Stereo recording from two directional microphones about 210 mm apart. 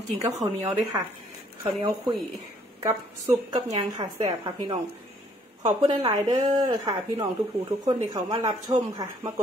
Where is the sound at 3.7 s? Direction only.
20° right (ahead or behind).